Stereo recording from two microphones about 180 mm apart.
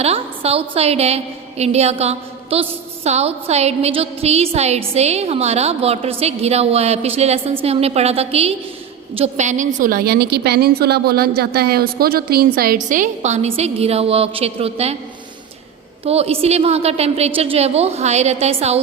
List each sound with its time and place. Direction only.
0.0 s a woman's voice: 35° right (ahead or behind)
16.0 s a woman's voice: 35° right (ahead or behind)